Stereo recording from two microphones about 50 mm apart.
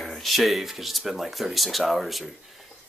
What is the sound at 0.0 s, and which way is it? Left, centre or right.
Speech, centre.